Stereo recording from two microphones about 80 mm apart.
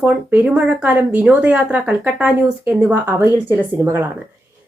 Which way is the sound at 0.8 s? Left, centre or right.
Centre.